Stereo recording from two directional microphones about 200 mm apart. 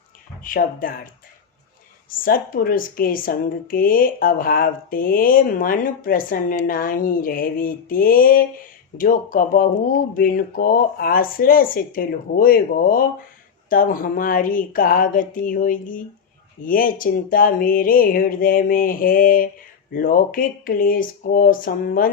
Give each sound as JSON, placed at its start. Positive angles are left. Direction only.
{"t": 0.4, "sound": "a woman's voice", "side_deg": 45}
{"t": 2.0, "sound": "a woman's voice", "side_deg": 45}